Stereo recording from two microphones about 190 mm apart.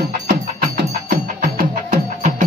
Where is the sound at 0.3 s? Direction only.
60° right (ahead or behind).